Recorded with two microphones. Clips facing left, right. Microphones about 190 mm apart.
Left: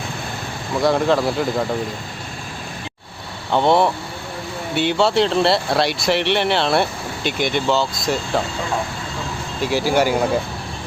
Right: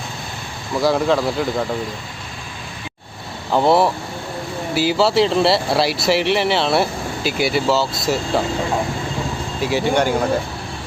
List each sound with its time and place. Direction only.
0.8 s speech: centre (ahead or behind)
3.5 s speech: 5° right (ahead or behind)
9.6 s speech: centre (ahead or behind)